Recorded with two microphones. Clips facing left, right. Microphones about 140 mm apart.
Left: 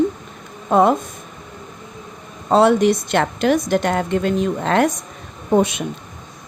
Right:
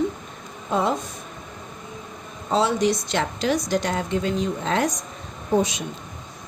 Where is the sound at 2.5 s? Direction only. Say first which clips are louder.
Left 7 dB; 60° left (ahead or behind).